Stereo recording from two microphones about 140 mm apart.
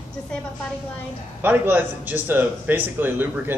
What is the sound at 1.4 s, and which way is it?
Speech, 10° right (ahead or behind).